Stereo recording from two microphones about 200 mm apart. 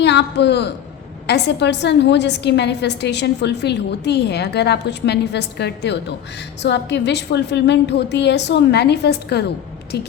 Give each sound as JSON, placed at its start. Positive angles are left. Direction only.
{"t": 0.0, "sound": "a woman's voice", "side_deg": 60}